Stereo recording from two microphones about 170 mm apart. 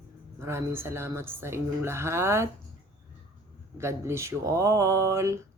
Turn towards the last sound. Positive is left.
turn(degrees=-15)  # may be behind; listen again after turning